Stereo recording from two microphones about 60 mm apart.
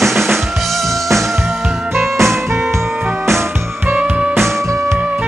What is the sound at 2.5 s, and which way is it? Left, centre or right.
Music, right.